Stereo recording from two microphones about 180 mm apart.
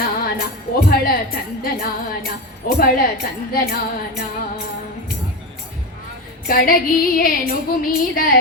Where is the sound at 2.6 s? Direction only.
55° left (ahead or behind).